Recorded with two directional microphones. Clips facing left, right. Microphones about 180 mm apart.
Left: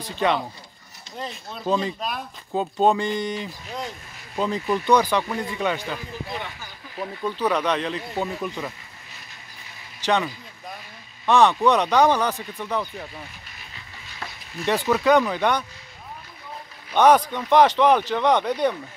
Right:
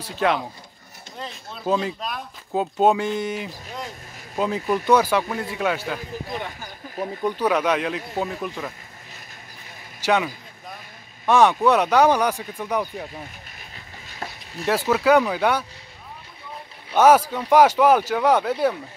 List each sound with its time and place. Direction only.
0.0 s speech: 5° right (ahead or behind)
6.2 s speech: 45° right (ahead or behind)
7.2 s speech: 10° right (ahead or behind)
10.0 s speech: 5° right (ahead or behind)
14.0 s a sound: 40° right (ahead or behind)
14.7 s speech: 5° right (ahead or behind)
16.9 s speech: 5° right (ahead or behind)